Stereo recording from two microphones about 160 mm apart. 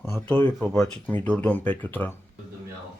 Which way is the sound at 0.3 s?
10° left (ahead or behind).